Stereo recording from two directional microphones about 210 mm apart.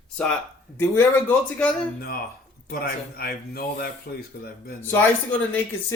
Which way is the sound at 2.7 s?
45° left (ahead or behind).